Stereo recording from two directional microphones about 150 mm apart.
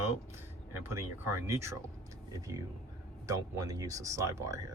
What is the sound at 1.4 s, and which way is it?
Speech, 20° right (ahead or behind).